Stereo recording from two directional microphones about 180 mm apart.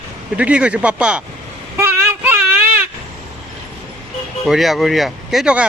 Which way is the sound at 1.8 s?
15° right (ahead or behind).